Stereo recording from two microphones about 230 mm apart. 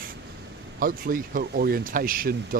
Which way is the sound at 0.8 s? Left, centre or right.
Right.